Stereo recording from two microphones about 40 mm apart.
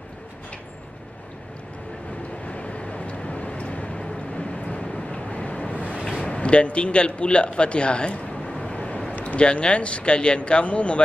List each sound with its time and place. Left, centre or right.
2.4 s vehicle: left
6.2 s speech: left
8.7 s a sound: left
9.4 s speech: left